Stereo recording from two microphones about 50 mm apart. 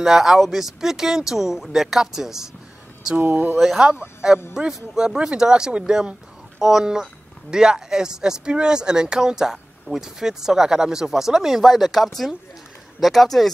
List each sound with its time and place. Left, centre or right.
0.0 s speech: centre
3.2 s speech: right
3.5 s speech: centre
11.6 s speech: centre